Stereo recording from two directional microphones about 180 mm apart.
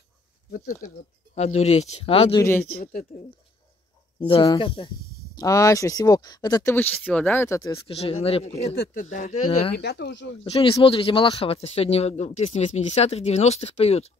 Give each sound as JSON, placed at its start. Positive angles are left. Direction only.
{"t": 0.5, "sound": "speech", "side_deg": 45}
{"t": 2.3, "sound": "speech", "side_deg": 10}
{"t": 2.8, "sound": "speech", "side_deg": 50}
{"t": 4.3, "sound": "speech", "side_deg": 25}
{"t": 7.7, "sound": "speech", "side_deg": 35}
{"t": 9.8, "sound": "speech", "side_deg": 70}
{"t": 10.4, "sound": "speech", "side_deg": 30}